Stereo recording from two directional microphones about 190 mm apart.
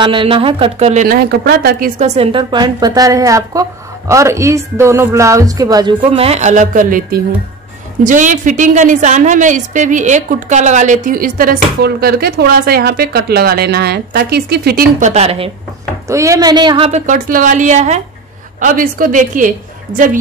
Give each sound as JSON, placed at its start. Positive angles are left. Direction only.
{"t": 0.0, "sound": "a woman's voice", "side_deg": -25}
{"t": 1.0, "sound": "a woman's voice", "side_deg": -50}
{"t": 2.1, "sound": "a woman's voice", "side_deg": -25}
{"t": 16.1, "sound": "a woman's voice", "side_deg": -15}
{"t": 17.0, "sound": "a woman's voice", "side_deg": -45}